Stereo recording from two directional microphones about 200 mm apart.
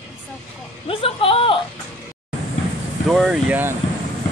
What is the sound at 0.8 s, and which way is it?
Speech, 25° left (ahead or behind).